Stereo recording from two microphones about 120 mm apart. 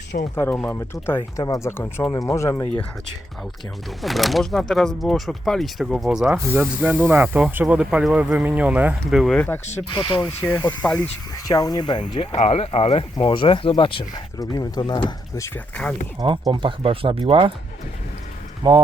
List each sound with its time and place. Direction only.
0.1 s speech: 90° left
0.7 s speech: 20° left (ahead or behind)
4.0 s speech: centre (ahead or behind)
6.3 s speech: 20° right (ahead or behind); by 9.4 s centre (ahead or behind)
9.9 s speech: 45° left (ahead or behind)
10.2 s speech: 20° left (ahead or behind)
10.6 s speech: 35° left (ahead or behind)
12.4 s speech: 60° left (ahead or behind)
13.2 s speech: 45° left (ahead or behind)
15.5 s speech: 10° left (ahead or behind)
16.1 s speech: 35° right (ahead or behind)
18.6 s speech: 35° right (ahead or behind)